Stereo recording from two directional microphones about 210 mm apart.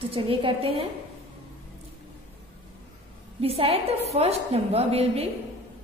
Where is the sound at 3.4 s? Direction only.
25° right (ahead or behind).